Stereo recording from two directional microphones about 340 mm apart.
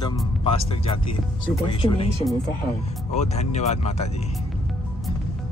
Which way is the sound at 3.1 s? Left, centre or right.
Centre.